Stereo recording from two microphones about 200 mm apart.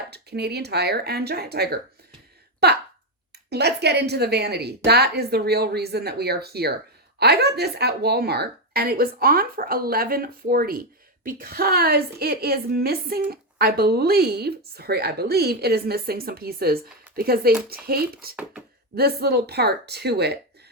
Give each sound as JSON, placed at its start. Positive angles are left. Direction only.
{"t": 0.1, "sound": "a woman's voice", "side_deg": -55}
{"t": 2.6, "sound": "a sound", "side_deg": -55}
{"t": 3.5, "sound": "a woman's voice", "side_deg": -55}